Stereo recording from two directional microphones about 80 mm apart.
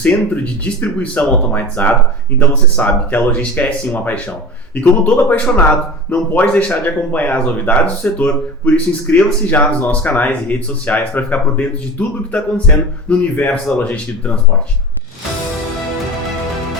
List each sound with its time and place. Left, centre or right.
0.6 s speech: centre